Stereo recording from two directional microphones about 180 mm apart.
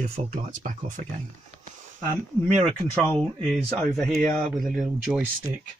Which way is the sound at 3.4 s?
Centre (ahead or behind).